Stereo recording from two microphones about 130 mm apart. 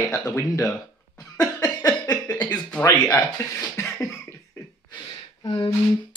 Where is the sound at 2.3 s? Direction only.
10° left (ahead or behind).